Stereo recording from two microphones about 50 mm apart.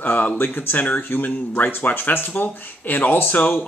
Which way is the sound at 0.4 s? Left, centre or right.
Left.